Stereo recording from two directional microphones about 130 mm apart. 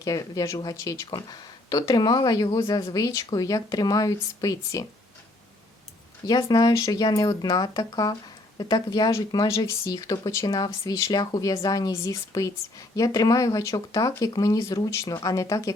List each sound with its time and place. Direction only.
0.0 s speech: 30° left (ahead or behind)
6.2 s speech: 30° left (ahead or behind)